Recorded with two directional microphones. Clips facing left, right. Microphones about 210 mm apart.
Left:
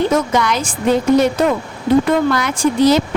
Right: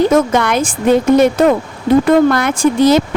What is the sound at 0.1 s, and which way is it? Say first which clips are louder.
Speech: right 4 dB; 55° right (ahead or behind).